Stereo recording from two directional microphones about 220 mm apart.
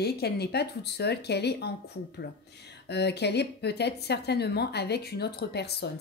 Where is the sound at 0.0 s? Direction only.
45° left (ahead or behind).